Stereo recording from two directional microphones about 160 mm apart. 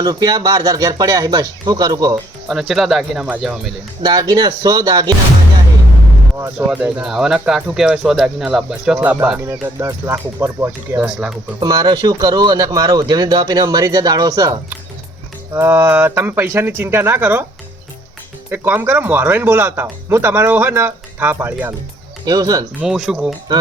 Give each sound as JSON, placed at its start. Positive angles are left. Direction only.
{"t": 0.0, "sound": "speech", "side_deg": -25}
{"t": 2.5, "sound": "speech", "side_deg": -5}
{"t": 4.0, "sound": "speech", "side_deg": -25}
{"t": 6.3, "sound": "speech", "side_deg": -20}
{"t": 6.7, "sound": "speech", "side_deg": -5}
{"t": 11.6, "sound": "speech", "side_deg": -25}
{"t": 18.5, "sound": "speech", "side_deg": -10}
{"t": 22.8, "sound": "speech", "side_deg": -5}